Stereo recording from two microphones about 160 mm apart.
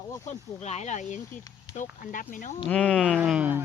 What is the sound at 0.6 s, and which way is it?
Speech, 45° left (ahead or behind).